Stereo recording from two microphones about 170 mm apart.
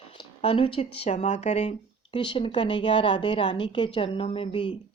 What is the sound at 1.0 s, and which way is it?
A woman's voice, 40° left (ahead or behind).